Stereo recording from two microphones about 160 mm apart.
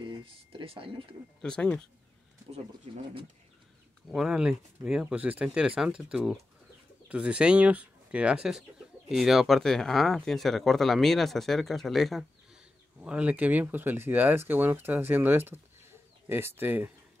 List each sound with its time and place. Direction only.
0.0 s speech: 30° right (ahead or behind)
1.4 s speech: 5° left (ahead or behind)
4.1 s speech: 5° right (ahead or behind)